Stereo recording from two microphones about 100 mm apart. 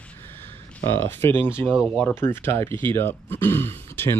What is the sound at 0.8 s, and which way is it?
Speech, 20° left (ahead or behind).